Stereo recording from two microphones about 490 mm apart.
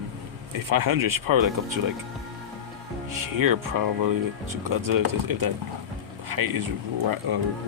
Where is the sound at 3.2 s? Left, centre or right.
Right.